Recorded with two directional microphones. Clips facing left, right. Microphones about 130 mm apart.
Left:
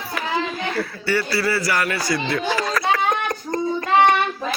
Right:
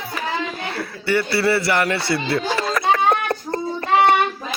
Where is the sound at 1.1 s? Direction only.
25° right (ahead or behind).